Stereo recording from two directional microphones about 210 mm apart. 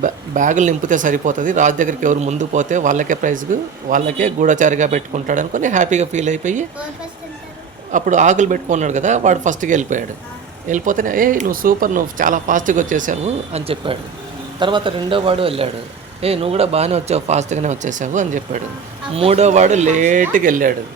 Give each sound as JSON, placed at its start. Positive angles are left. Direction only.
{"t": 0.0, "sound": "speech", "side_deg": -35}
{"t": 7.9, "sound": "a man's voice", "side_deg": -35}